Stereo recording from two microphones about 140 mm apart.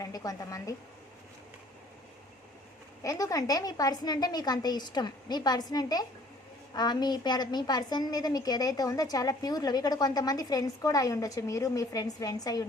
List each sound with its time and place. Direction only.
0.0 s a woman's voice: 25° left (ahead or behind)
3.0 s a woman's voice: 25° left (ahead or behind)